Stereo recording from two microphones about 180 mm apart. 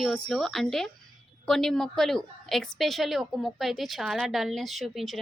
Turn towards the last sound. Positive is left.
turn(degrees=0)  # may be behind; listen again after turning